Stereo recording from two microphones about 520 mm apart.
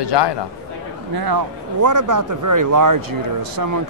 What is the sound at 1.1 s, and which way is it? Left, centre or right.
Speech, right.